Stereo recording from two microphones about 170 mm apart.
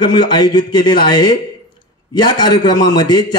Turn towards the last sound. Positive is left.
turn(degrees=25)  # may be behind; listen again after turning